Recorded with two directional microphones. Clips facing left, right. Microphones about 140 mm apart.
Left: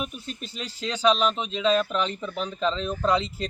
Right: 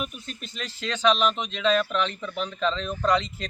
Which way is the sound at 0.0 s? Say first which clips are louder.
Left 1 dB; 10° left (ahead or behind).